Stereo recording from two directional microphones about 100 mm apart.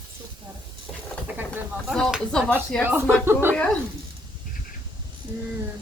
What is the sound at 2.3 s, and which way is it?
Speech, 5° left (ahead or behind).